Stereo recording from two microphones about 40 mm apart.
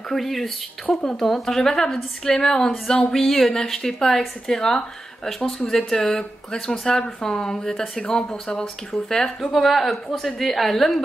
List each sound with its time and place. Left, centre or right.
0.1 s a woman's voice: centre